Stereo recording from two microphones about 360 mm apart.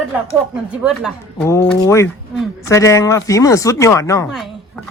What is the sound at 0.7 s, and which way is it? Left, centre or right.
Speech, centre.